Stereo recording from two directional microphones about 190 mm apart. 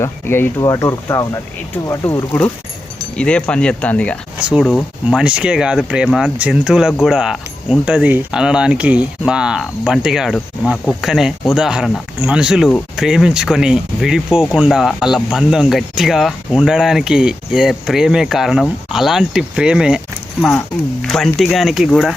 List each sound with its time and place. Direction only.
0.0 s speech: 15° left (ahead or behind)
4.4 s speech: 5° right (ahead or behind)
21.0 s speech: centre (ahead or behind)